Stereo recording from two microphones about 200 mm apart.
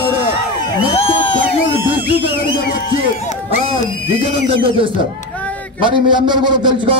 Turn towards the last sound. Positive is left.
turn(degrees=-20)  # may be behind; listen again after turning